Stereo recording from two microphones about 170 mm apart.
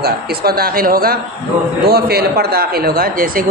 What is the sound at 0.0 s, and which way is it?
Speech, 65° right (ahead or behind).